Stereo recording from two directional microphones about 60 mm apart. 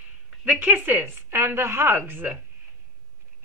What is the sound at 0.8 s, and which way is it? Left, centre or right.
Speech, right.